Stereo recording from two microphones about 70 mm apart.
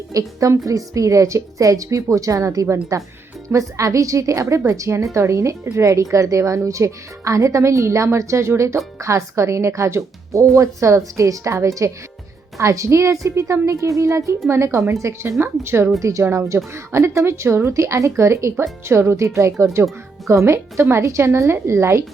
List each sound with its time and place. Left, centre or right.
0.1 s a woman's voice: right
16.0 s a woman's voice: right